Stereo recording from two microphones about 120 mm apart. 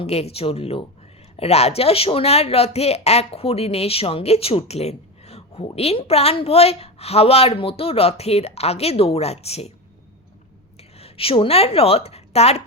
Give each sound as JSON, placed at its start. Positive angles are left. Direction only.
{"t": 0.0, "sound": "speech", "side_deg": 60}
{"t": 10.8, "sound": "a woman's voice", "side_deg": 55}